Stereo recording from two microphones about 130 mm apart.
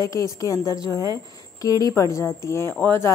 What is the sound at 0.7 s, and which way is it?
Speech, 30° right (ahead or behind).